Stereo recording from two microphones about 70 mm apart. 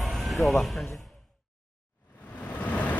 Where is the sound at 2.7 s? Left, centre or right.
Left.